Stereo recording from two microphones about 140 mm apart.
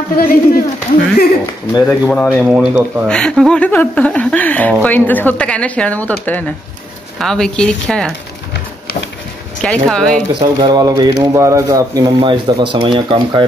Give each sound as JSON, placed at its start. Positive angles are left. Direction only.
{"t": 0.2, "sound": "a man's voice", "side_deg": 90}
{"t": 1.7, "sound": "speech", "side_deg": 30}
{"t": 2.0, "sound": "speech", "side_deg": 10}
{"t": 2.3, "sound": "speech", "side_deg": -10}
{"t": 3.1, "sound": "speech", "side_deg": 5}
{"t": 9.6, "sound": "speech", "side_deg": 5}
{"t": 10.4, "sound": "speech", "side_deg": -30}